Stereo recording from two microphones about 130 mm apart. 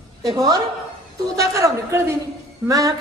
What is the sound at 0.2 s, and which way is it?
A woman's voice, 30° right (ahead or behind).